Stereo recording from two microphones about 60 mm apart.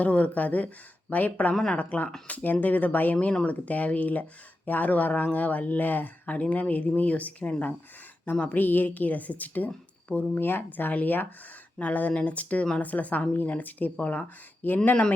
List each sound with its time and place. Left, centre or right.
0.0 s speech: left
9.6 s a sound: left
10.3 s speech: left